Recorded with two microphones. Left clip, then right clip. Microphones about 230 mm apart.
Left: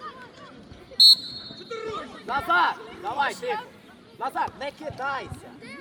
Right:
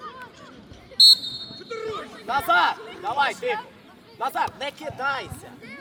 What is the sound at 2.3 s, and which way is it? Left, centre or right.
Speech, right.